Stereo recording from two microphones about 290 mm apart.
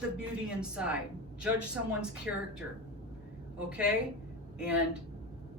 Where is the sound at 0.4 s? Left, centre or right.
Centre.